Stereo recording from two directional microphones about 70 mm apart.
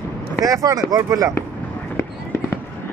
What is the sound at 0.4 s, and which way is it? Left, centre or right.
Speech, right.